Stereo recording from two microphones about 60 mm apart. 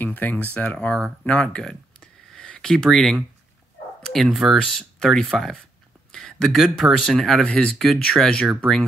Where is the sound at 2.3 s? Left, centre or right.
Centre.